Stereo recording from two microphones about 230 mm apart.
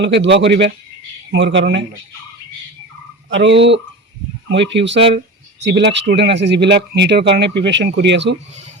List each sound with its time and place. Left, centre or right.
0.0 s speech: right
3.2 s speech: right